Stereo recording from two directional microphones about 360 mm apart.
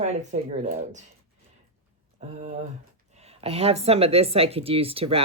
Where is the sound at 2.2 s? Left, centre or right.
Centre.